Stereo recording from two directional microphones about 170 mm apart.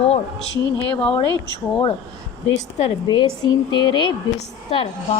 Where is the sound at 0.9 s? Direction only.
30° left (ahead or behind).